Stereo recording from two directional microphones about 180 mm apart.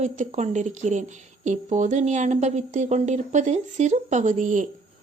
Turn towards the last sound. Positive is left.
turn(degrees=-45)  # may be behind; listen again after turning